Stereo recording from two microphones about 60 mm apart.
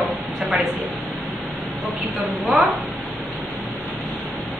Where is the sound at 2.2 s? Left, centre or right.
Right.